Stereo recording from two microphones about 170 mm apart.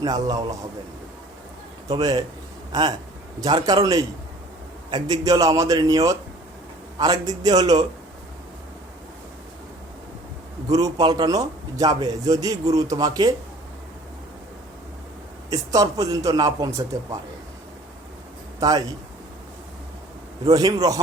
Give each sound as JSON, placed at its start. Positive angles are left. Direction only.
{"t": 0.0, "sound": "a man's voice", "side_deg": -25}
{"t": 2.0, "sound": "a man's voice", "side_deg": -25}
{"t": 3.4, "sound": "a man's voice", "side_deg": -25}
{"t": 10.7, "sound": "a man's voice", "side_deg": -20}
{"t": 15.4, "sound": "a man's voice", "side_deg": -20}
{"t": 18.6, "sound": "a man's voice", "side_deg": -25}
{"t": 20.4, "sound": "a man's voice", "side_deg": -25}